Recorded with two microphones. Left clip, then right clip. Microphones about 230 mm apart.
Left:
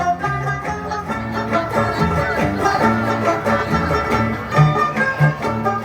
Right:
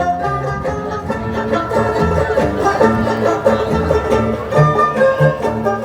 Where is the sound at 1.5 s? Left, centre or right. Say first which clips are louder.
Right 2 dB; left.